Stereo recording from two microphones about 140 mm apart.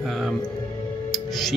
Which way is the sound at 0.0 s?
Centre (ahead or behind).